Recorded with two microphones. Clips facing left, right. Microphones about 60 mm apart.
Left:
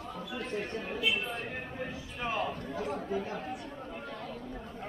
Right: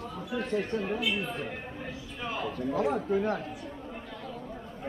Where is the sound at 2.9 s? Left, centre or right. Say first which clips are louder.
Right 6 dB; right.